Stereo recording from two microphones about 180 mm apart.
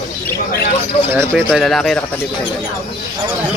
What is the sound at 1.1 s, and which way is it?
Speech, 15° right (ahead or behind).